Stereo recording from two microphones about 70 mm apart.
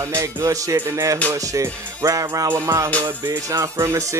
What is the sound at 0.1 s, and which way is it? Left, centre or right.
Speech, right.